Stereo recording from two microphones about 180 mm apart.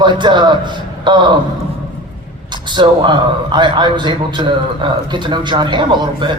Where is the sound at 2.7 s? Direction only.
25° right (ahead or behind).